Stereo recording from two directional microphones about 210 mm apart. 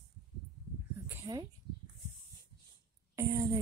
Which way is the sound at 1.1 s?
15° right (ahead or behind).